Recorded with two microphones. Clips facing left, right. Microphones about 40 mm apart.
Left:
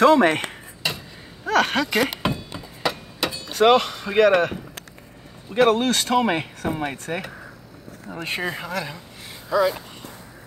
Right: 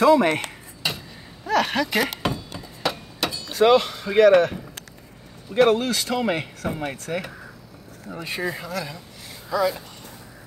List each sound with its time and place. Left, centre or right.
0.0 s cutlery: left
0.8 s a sound: centre
1.4 s speech: left
2.8 s a sound: centre
3.5 s speech: left
4.1 s speech: centre
5.5 s speech: centre
5.8 s speech: left
6.2 s speech: left
8.2 s speech: left
9.5 s speech: centre